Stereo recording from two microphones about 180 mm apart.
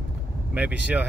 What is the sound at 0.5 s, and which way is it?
Speech, 10° right (ahead or behind).